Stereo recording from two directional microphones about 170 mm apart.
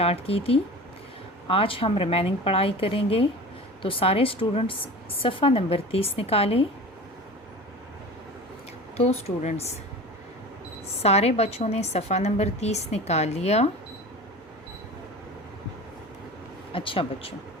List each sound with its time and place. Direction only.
0.0 s a woman's voice: 35° left (ahead or behind)
9.0 s a woman's voice: 40° left (ahead or behind)
11.0 s a woman's voice: 40° left (ahead or behind)
16.7 s a woman's voice: 30° left (ahead or behind)